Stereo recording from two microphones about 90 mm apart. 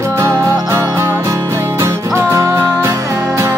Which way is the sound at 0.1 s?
30° right (ahead or behind).